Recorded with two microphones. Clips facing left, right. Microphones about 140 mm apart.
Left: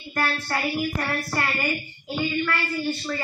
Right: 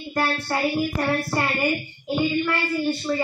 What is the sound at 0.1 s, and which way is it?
Speech, 25° right (ahead or behind).